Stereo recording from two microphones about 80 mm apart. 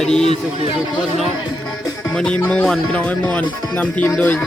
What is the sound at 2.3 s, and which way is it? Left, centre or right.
Speech, left.